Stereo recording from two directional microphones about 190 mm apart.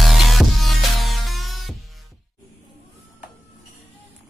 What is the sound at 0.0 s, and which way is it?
Music, centre (ahead or behind).